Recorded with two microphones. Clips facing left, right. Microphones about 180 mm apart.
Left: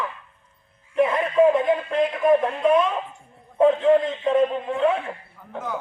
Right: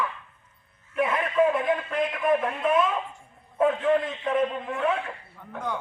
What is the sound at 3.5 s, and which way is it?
A man's voice, 25° left (ahead or behind).